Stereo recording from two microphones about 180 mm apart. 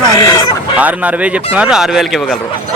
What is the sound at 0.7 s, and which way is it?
A man's voice, 10° right (ahead or behind).